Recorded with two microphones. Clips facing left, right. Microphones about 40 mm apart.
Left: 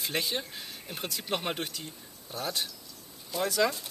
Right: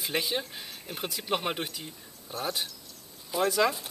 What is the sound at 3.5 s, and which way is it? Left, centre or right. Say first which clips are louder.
Speech: right 1 dB; centre.